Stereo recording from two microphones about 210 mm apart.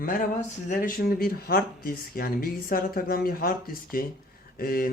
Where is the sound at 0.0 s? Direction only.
40° left (ahead or behind).